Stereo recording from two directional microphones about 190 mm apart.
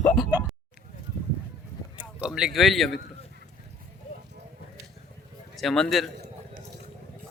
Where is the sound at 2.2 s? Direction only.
5° right (ahead or behind).